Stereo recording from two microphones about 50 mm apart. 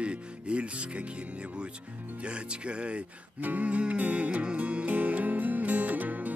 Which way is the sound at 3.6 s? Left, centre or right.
Right.